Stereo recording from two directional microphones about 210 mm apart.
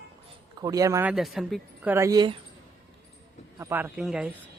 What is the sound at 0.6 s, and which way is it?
Speech, 15° right (ahead or behind).